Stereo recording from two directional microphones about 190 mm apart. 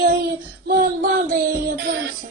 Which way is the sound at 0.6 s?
50° right (ahead or behind).